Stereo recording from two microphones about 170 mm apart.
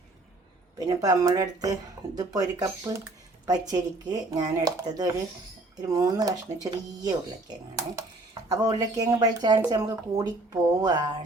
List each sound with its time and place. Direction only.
0.8 s speech: 20° right (ahead or behind)